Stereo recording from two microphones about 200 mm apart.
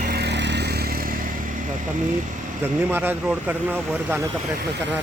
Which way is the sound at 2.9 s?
10° right (ahead or behind).